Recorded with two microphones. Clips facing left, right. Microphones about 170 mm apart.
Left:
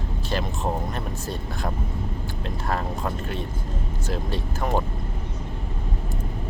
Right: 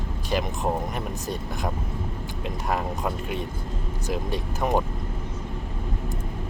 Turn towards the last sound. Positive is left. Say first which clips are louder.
# right 1 dB
turn(degrees=-15)  # may be behind; listen again after turning